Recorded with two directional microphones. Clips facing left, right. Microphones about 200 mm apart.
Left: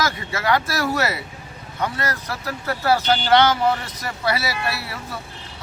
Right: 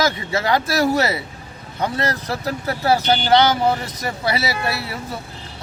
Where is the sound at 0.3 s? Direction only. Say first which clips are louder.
Right 2 dB; 30° right (ahead or behind).